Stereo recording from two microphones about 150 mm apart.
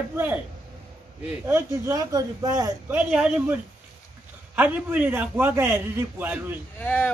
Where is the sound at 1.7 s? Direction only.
25° right (ahead or behind).